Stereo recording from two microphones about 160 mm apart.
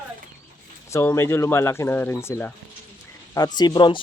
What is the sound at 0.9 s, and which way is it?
Speech, 15° left (ahead or behind).